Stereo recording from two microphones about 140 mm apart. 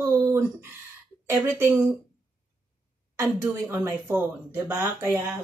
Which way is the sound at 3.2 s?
20° right (ahead or behind).